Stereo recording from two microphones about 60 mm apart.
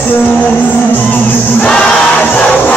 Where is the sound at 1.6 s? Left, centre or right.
Centre.